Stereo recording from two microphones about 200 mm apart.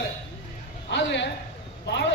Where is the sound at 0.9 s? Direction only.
60° left (ahead or behind).